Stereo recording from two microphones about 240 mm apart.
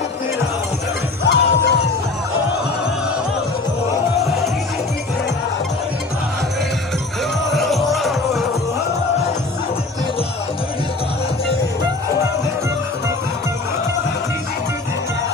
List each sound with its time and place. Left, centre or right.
1.3 s music: left
7.5 s music: centre